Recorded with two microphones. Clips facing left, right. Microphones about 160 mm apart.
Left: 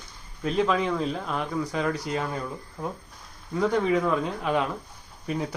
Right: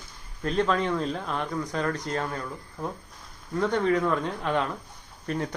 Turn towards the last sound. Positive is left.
turn(degrees=5)  # may be behind; listen again after turning